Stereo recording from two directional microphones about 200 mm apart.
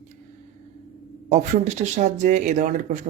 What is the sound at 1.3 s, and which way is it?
Speech, 35° right (ahead or behind).